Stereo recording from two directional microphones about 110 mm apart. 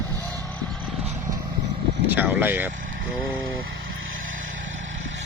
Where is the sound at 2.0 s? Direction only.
15° right (ahead or behind).